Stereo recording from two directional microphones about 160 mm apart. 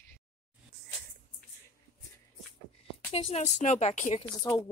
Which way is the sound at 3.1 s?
40° left (ahead or behind).